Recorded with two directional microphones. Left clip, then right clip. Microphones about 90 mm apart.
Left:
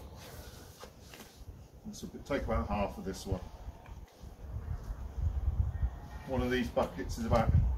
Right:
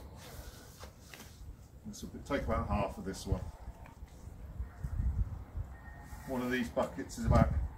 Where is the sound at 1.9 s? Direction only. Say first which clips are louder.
Left 1 dB; 20° left (ahead or behind).